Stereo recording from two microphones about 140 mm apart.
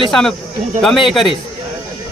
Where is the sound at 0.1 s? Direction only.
Centre (ahead or behind).